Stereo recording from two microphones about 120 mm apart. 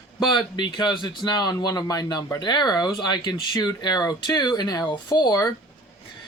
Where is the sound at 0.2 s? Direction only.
40° left (ahead or behind).